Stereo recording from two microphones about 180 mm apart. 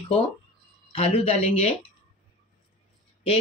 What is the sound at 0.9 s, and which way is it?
Speech, 35° left (ahead or behind).